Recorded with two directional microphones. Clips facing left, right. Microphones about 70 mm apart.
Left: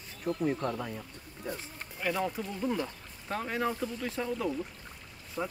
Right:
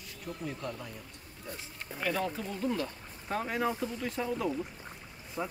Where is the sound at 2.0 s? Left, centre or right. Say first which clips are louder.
Left 1 dB; centre.